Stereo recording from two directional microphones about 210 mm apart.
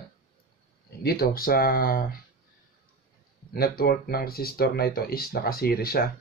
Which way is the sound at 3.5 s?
45° left (ahead or behind).